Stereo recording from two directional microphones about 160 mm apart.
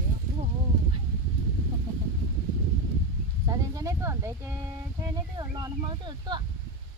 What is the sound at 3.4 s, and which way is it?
Speech, 20° right (ahead or behind).